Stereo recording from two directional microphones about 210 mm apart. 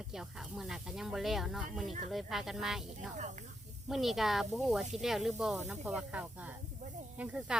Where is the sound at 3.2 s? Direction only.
35° right (ahead or behind).